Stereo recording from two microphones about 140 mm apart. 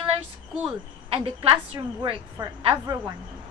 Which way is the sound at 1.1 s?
40° right (ahead or behind).